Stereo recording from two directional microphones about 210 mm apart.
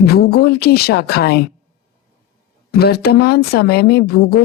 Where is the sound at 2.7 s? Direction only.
50° left (ahead or behind).